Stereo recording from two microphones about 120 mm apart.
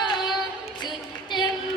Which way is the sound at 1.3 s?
40° left (ahead or behind).